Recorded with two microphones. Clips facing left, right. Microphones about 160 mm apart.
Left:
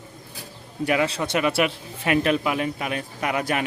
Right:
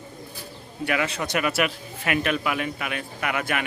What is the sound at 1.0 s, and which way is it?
Speech, 30° left (ahead or behind).